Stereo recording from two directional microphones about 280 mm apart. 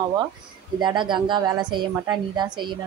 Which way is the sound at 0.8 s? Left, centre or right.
Centre.